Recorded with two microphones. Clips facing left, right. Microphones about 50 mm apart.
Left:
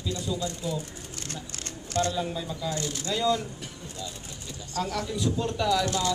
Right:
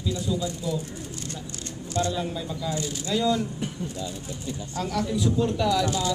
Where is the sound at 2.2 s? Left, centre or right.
Centre.